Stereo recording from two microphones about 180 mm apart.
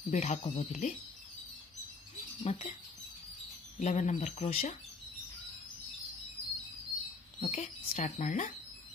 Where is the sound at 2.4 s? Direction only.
35° left (ahead or behind).